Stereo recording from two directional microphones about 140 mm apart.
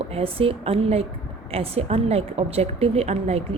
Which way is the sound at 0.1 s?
45° right (ahead or behind).